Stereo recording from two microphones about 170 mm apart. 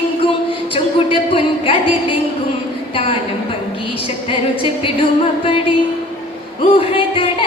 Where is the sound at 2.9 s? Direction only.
30° left (ahead or behind).